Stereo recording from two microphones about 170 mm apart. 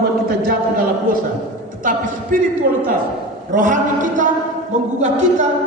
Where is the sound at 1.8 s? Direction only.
55° right (ahead or behind).